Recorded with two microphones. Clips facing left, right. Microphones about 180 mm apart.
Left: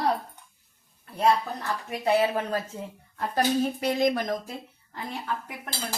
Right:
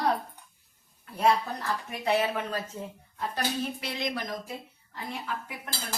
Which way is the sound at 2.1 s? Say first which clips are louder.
Left 4 dB; 35° left (ahead or behind).